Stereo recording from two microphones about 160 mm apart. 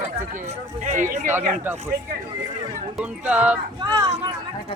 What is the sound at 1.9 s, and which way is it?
Speech, 80° right.